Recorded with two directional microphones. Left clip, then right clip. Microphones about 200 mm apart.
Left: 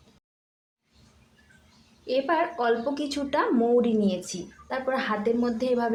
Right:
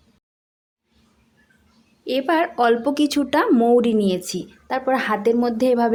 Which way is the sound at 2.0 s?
45° right (ahead or behind).